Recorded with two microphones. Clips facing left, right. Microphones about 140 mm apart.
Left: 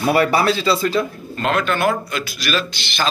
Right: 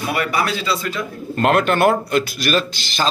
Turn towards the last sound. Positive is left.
turn(degrees=-40)  # may be behind; listen again after turning